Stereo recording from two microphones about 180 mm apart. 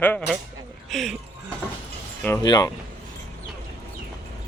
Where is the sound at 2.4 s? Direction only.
20° left (ahead or behind).